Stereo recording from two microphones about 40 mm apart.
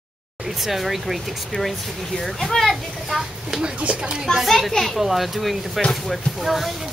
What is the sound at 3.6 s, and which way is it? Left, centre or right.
Speech, right.